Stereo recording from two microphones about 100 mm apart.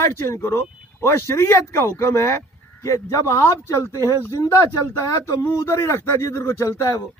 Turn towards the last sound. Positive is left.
turn(degrees=30)  # may be behind; listen again after turning